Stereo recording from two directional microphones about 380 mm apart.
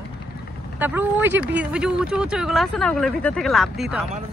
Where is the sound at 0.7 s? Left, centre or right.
Centre.